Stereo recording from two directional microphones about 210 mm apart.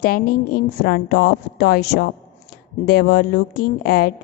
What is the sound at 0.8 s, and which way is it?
Speech, 50° left (ahead or behind).